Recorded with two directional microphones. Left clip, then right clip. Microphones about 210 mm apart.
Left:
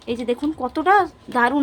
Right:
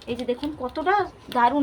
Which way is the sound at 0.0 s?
45° left (ahead or behind).